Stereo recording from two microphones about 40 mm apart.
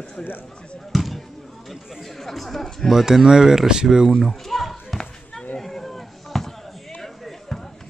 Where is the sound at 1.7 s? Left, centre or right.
Centre.